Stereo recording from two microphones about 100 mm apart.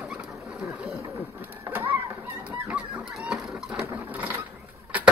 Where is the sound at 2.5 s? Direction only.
15° right (ahead or behind).